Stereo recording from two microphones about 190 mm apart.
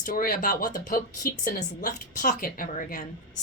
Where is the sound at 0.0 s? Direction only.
45° left (ahead or behind).